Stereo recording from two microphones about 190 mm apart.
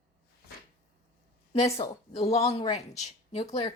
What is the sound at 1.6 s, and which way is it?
Speech, 35° left (ahead or behind).